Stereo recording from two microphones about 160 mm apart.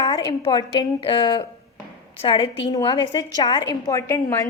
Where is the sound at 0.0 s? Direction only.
30° left (ahead or behind).